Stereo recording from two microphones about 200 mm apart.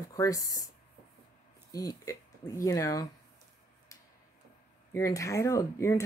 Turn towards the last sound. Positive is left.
turn(degrees=15)  # may be behind; listen again after turning